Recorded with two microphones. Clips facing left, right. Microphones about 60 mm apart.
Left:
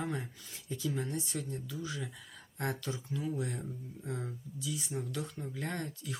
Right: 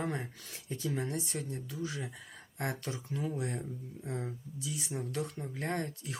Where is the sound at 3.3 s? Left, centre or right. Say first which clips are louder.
Left 2 dB; right.